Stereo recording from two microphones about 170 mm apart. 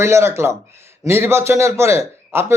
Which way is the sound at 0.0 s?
15° right (ahead or behind).